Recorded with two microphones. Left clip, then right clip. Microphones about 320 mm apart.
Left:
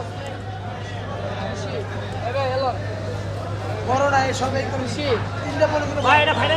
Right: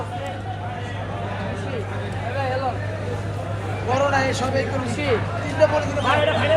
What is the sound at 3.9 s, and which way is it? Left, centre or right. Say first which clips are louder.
Speech: left 1 dB; left.